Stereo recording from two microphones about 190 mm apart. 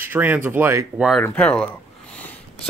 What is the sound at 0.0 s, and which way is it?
Speech, 10° right (ahead or behind).